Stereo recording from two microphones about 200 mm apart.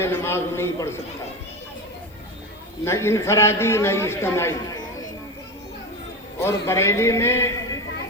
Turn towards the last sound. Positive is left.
turn(degrees=15)  # may be behind; listen again after turning